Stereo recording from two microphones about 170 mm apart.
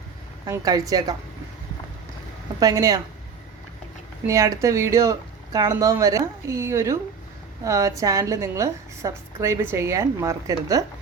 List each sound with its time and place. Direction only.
0.4 s a woman's voice: 20° right (ahead or behind)
2.6 s a woman's voice: 20° right (ahead or behind)
4.3 s a woman's voice: 20° right (ahead or behind)